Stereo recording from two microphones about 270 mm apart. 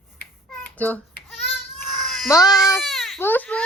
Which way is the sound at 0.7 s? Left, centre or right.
Centre.